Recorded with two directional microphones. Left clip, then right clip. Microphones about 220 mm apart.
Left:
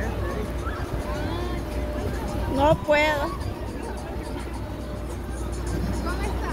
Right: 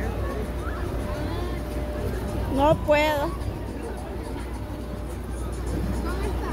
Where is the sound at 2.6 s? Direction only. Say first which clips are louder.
Even; 20° right (ahead or behind).